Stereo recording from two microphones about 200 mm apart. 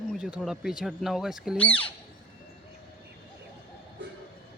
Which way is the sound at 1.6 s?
5° left (ahead or behind).